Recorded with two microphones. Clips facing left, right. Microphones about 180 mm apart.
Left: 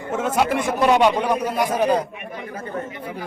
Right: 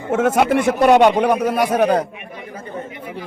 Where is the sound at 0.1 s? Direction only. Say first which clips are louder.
Right 5 dB; 65° right (ahead or behind).